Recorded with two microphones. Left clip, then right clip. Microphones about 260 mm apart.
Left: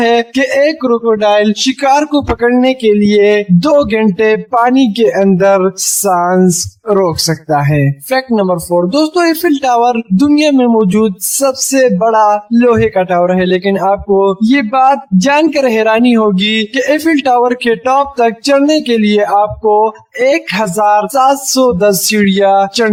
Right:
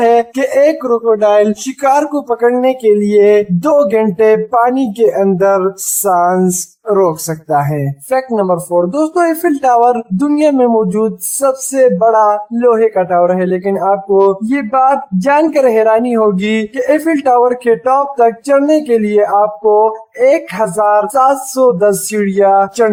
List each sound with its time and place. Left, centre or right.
0.0 s speech: left
21.5 s a sound: left
21.8 s speech: left